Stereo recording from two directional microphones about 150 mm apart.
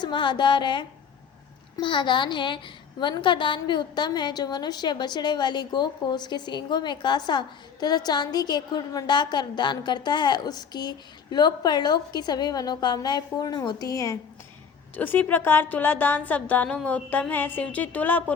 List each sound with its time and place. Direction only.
0.0 s a woman's voice: 30° left (ahead or behind); by 18.2 s 10° left (ahead or behind)